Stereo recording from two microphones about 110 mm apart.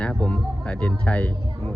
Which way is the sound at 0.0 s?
10° left (ahead or behind).